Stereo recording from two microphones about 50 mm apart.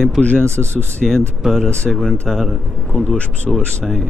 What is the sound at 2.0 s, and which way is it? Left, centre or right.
Speech, centre.